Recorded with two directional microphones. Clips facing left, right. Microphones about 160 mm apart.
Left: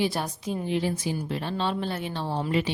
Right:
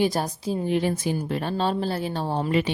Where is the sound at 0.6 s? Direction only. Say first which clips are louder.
Right 3 dB; 55° right (ahead or behind).